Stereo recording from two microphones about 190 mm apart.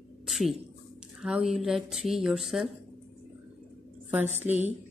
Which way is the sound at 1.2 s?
Centre (ahead or behind).